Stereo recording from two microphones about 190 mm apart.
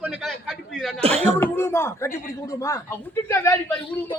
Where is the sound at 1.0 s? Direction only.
30° right (ahead or behind).